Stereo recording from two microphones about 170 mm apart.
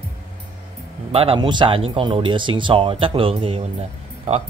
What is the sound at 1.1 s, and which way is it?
A man's voice, 35° right (ahead or behind).